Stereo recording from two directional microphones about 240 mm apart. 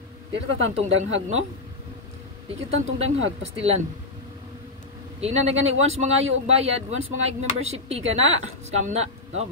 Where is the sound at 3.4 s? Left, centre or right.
Right.